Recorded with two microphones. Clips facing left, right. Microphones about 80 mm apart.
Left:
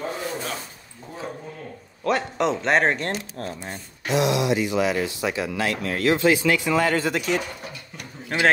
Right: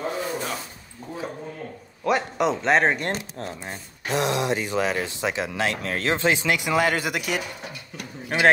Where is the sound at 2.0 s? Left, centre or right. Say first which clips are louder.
Even; centre.